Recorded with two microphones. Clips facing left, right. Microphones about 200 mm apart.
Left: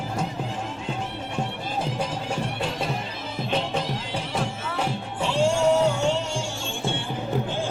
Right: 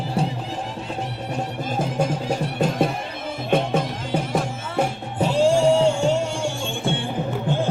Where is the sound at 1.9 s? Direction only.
45° right (ahead or behind).